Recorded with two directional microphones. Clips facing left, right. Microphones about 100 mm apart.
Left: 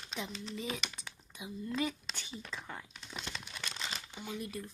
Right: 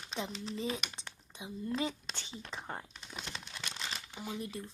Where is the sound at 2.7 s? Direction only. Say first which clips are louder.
Right 3 dB; 40° right (ahead or behind).